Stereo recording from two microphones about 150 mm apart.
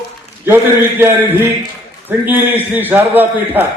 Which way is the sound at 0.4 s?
15° right (ahead or behind).